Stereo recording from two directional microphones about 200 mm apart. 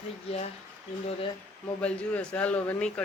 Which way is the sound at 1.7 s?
5° left (ahead or behind).